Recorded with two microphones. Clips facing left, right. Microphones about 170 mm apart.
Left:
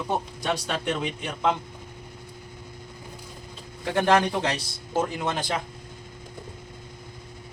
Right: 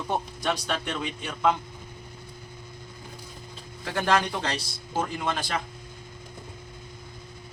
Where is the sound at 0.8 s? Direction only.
15° left (ahead or behind).